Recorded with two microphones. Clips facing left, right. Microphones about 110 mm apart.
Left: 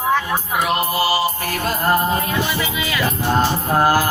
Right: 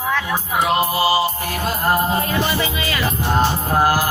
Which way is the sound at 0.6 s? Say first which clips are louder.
Right 2 dB; 20° right (ahead or behind).